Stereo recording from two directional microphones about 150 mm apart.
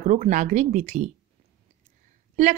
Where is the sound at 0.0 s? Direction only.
50° right (ahead or behind).